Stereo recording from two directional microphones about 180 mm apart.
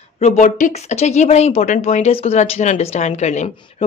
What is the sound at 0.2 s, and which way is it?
A woman's voice, 45° left (ahead or behind).